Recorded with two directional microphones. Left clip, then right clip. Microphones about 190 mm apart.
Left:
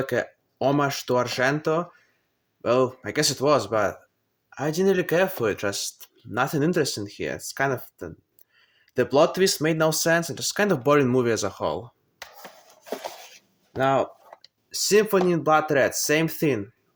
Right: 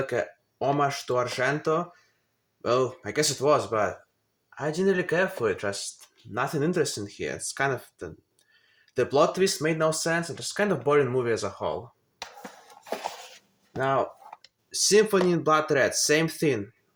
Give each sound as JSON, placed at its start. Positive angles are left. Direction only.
{"t": 0.0, "sound": "speech", "side_deg": 40}
{"t": 4.4, "sound": "speech", "side_deg": 55}
{"t": 12.4, "sound": "a sound", "side_deg": 35}
{"t": 13.7, "sound": "speech", "side_deg": 30}